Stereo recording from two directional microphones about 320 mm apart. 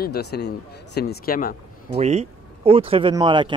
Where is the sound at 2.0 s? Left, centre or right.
Centre.